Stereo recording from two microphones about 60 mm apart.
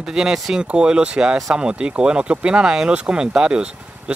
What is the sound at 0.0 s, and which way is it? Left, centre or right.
Speech, centre.